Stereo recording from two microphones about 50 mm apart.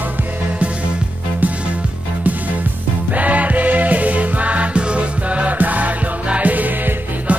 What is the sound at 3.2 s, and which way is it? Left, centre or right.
Music, right.